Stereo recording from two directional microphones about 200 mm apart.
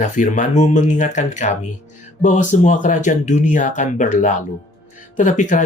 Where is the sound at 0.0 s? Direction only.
40° left (ahead or behind).